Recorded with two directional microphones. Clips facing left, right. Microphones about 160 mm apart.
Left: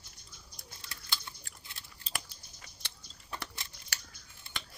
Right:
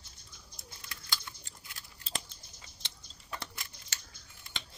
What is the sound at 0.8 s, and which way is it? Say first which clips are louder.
Bird: right 1 dB; 30° left (ahead or behind).